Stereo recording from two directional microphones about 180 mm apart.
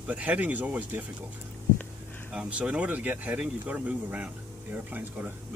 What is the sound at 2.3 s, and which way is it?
Speech, 5° right (ahead or behind).